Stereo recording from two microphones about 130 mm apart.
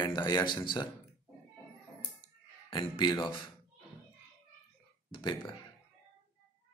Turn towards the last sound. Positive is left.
turn(degrees=35)  # may be behind; listen again after turning